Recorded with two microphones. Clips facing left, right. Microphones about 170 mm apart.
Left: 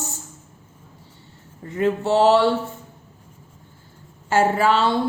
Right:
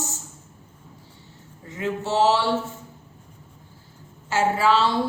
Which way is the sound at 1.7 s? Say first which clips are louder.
Left 7 dB; 60° left (ahead or behind).